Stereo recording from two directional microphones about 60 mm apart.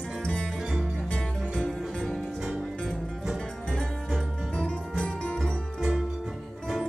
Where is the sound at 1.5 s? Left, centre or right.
Centre.